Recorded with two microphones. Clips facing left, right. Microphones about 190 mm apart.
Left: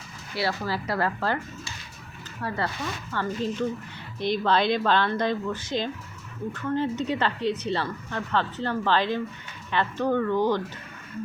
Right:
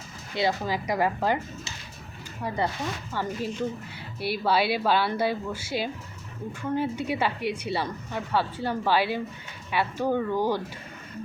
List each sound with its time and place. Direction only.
0.3 s speech: 20° right (ahead or behind)
2.4 s speech: 15° right (ahead or behind)